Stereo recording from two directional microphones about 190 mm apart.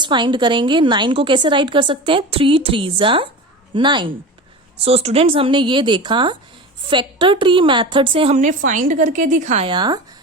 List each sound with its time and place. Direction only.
0.0 s a woman's voice: 25° right (ahead or behind); by 9.6 s 40° right (ahead or behind)
9.6 s a woman's voice: 25° right (ahead or behind)